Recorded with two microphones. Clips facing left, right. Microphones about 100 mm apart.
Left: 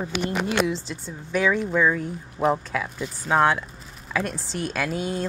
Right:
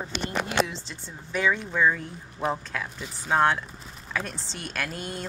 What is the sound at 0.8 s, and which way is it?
Speech, 5° left (ahead or behind).